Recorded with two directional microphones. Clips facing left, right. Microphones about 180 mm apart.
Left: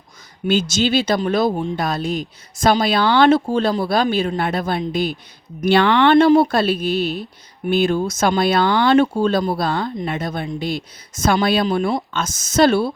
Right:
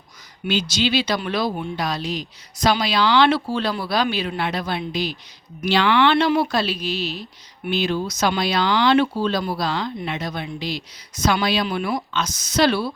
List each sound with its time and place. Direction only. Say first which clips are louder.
0.4 s speech: left 4 dB; 45° left (ahead or behind)
11.6 s speech: left 5 dB; 30° left (ahead or behind)
12.1 s speech: left 3 dB; 50° left (ahead or behind)